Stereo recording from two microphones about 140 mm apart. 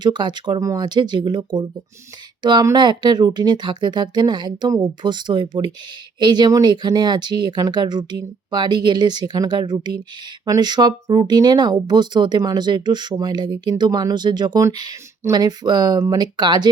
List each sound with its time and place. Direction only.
0.0 s speech: 30° right (ahead or behind)